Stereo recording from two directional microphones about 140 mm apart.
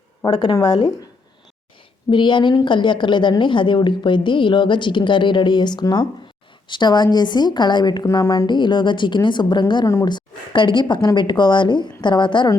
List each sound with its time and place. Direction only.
0.3 s a woman's voice: 30° left (ahead or behind)
2.0 s a woman's voice: 35° left (ahead or behind)